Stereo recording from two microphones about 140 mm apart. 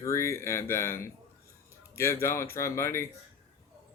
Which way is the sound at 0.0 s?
20° left (ahead or behind).